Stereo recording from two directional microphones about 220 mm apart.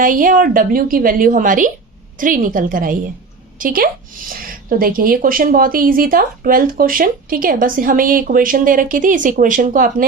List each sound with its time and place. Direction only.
0.0 s speech: 40° right (ahead or behind)